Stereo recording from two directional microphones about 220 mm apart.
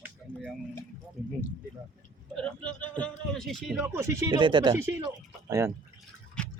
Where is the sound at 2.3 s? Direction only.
5° left (ahead or behind).